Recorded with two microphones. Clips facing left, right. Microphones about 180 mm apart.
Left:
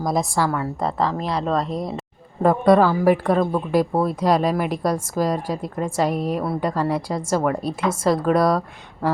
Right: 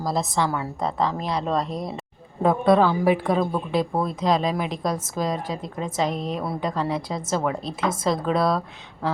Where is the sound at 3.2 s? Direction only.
5° right (ahead or behind).